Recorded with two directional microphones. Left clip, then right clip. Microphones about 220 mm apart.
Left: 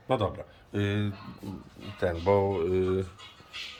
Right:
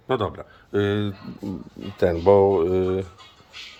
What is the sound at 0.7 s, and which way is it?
Speech, 25° right (ahead or behind).